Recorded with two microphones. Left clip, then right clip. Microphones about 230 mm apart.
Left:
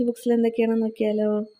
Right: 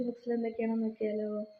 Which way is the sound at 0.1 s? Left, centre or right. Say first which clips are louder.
Left 12 dB; left.